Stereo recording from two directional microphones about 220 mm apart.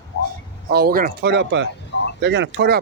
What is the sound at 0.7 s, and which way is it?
Speech, 45° right (ahead or behind).